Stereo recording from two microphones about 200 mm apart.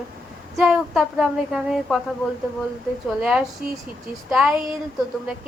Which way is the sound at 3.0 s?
5° right (ahead or behind).